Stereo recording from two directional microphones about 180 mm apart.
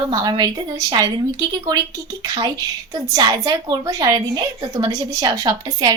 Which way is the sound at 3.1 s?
20° right (ahead or behind).